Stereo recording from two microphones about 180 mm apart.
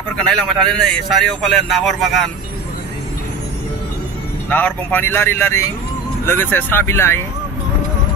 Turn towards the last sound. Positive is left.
turn(degrees=15)  # may be behind; listen again after turning